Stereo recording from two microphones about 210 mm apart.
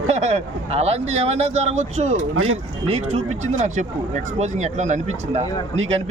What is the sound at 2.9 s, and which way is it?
Speech, 30° right (ahead or behind).